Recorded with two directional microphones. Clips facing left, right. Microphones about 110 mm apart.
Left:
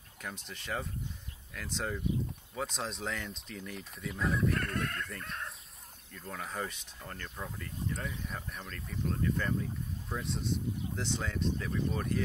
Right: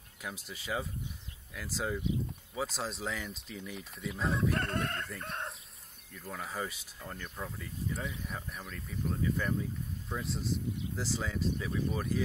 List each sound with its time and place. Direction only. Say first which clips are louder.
0.2 s speech: right 1 dB; 5° right (ahead or behind)
4.6 s chicken: right 1 dB; 30° right (ahead or behind)
5.2 s speech: right 2 dB; 30° right (ahead or behind)
6.1 s speech: even; 5° right (ahead or behind)